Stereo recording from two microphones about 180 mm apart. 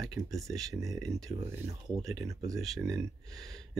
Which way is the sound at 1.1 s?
15° right (ahead or behind).